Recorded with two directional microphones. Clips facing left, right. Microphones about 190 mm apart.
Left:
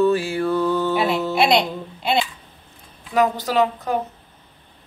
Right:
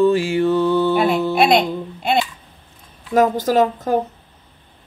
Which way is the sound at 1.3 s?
50° right (ahead or behind).